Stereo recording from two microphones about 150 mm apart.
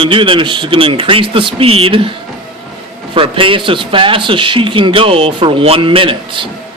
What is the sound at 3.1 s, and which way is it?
A man's voice, 35° right (ahead or behind).